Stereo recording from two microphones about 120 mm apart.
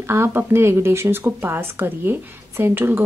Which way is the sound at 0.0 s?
20° right (ahead or behind).